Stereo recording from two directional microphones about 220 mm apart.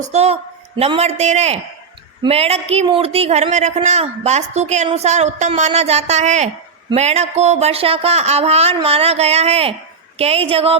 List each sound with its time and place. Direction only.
0.1 s speech: 30° right (ahead or behind)